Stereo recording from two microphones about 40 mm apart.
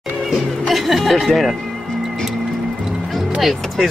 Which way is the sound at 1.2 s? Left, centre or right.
Centre.